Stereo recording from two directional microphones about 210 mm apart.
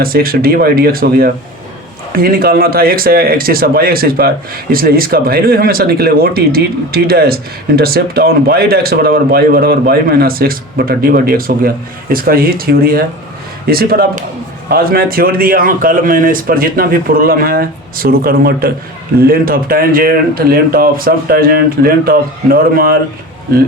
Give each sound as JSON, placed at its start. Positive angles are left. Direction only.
{"t": 0.0, "sound": "a man's voice", "side_deg": -45}